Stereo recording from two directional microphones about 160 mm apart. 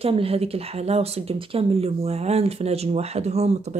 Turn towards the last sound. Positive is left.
turn(degrees=-45)  # may be behind; listen again after turning